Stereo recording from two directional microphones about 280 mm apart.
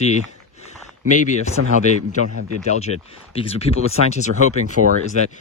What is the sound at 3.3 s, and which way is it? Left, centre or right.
Speech, left.